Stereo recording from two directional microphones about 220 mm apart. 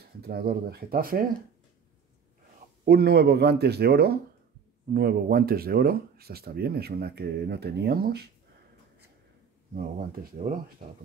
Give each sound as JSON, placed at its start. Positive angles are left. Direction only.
{"t": 0.0, "sound": "speech", "side_deg": -45}
{"t": 2.8, "sound": "speech", "side_deg": -45}
{"t": 10.3, "sound": "speech", "side_deg": -40}